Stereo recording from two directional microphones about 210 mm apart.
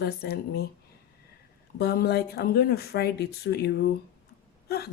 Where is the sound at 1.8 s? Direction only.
50° left (ahead or behind).